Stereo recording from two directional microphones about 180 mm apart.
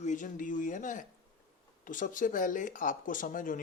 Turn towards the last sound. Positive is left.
turn(degrees=50)  # may be behind; listen again after turning